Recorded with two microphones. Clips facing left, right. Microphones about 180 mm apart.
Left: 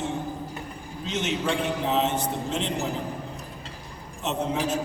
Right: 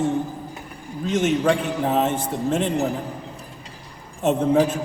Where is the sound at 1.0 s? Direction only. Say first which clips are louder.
Right 8 dB; 50° right (ahead or behind).